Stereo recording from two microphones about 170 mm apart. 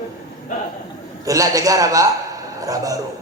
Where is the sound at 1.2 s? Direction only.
20° right (ahead or behind).